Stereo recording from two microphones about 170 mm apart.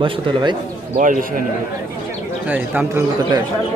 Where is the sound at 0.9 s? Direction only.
50° right (ahead or behind).